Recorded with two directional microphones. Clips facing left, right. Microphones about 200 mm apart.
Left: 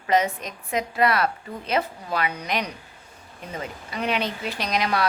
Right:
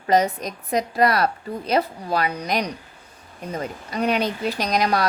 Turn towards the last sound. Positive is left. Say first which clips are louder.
# right 3 dB
turn(degrees=-40)  # may be behind; listen again after turning